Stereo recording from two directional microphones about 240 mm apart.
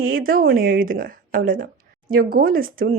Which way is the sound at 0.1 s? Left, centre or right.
Right.